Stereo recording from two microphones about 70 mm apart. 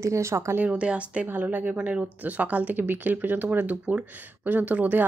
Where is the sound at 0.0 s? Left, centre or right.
Right.